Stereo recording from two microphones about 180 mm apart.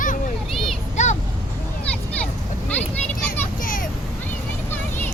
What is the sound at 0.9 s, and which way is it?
Vehicle, 40° left (ahead or behind).